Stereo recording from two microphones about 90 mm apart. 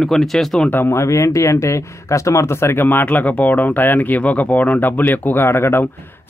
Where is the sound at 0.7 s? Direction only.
25° left (ahead or behind).